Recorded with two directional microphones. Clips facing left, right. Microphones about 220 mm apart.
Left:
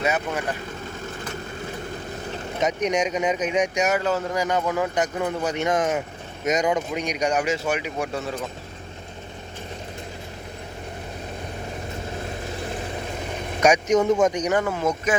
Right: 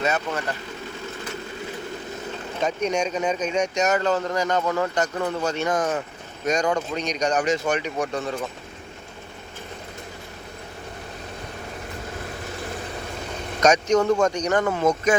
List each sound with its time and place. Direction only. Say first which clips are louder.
0.0 s speech: even; 15° left (ahead or behind)
2.6 s speech: left 1 dB; 20° left (ahead or behind)
13.6 s speech: even; 15° left (ahead or behind)